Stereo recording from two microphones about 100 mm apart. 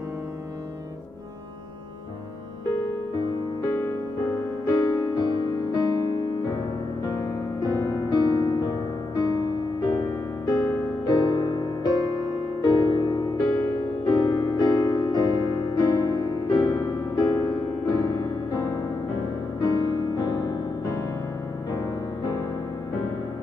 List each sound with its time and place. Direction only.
3.6 s music: 35° left (ahead or behind)
7.7 s music: 35° left (ahead or behind)